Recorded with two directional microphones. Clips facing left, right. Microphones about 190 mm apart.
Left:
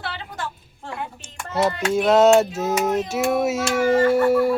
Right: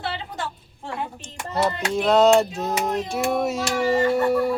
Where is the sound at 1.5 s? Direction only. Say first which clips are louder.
Left 3 dB; 5° left (ahead or behind).